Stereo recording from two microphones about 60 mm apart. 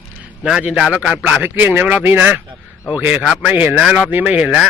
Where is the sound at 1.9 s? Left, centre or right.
Right.